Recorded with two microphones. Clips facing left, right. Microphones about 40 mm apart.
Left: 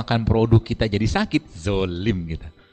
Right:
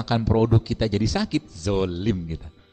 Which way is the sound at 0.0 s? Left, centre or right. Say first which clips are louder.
Left 1 dB; left.